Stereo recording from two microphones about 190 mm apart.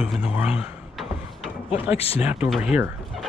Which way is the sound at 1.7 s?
30° left (ahead or behind).